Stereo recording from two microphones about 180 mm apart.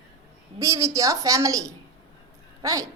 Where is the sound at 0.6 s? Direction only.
15° right (ahead or behind).